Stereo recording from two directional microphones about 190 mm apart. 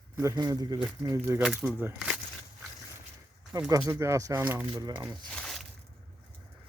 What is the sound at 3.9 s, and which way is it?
Speech, 15° right (ahead or behind).